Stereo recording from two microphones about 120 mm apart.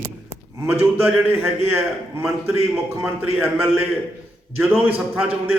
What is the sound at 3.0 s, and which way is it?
Speech, 20° right (ahead or behind).